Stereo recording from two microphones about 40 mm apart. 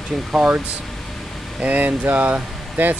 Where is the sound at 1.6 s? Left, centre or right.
Right.